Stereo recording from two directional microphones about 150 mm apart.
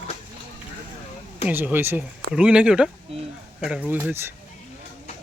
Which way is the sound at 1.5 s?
10° right (ahead or behind).